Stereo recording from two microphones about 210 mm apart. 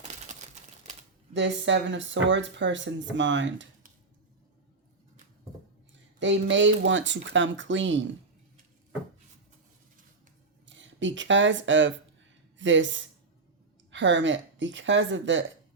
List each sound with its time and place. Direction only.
0.0 s crumpling: 35° right (ahead or behind)
1.3 s speech: 60° right (ahead or behind)
6.1 s speech: 60° right (ahead or behind)
10.7 s speech: 60° right (ahead or behind)